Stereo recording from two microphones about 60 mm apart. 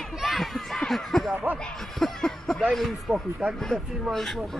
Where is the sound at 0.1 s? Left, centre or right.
Centre.